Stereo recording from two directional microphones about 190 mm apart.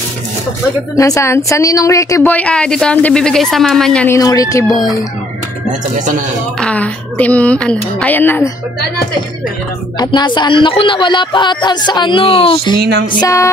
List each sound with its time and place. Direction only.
0.9 s speech: 15° left (ahead or behind)
4.2 s speech: 20° left (ahead or behind)
4.6 s speech: centre (ahead or behind)
5.7 s speech: 40° right (ahead or behind)
6.6 s speech: 5° left (ahead or behind)
9.9 s speech: 25° left (ahead or behind)
13.2 s speech: 15° left (ahead or behind)